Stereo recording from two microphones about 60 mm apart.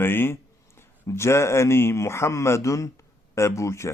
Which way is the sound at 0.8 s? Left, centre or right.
Left.